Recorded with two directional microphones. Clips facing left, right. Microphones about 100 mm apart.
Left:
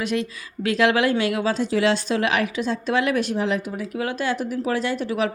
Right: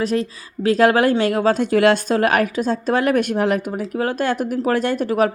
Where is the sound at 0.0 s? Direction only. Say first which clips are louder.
Right 4 dB; 35° right (ahead or behind); by 3.8 s 55° right (ahead or behind).